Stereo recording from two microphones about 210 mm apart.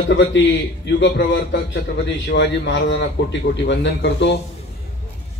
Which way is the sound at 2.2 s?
55° left (ahead or behind).